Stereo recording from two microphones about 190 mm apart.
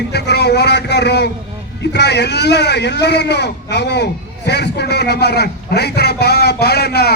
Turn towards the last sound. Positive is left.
turn(degrees=60)  # may be behind; listen again after turning